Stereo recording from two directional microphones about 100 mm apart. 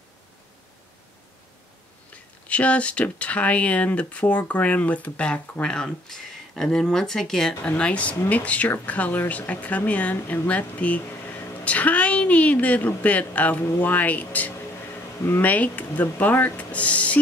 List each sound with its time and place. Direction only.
2.4 s speech: 15° left (ahead or behind)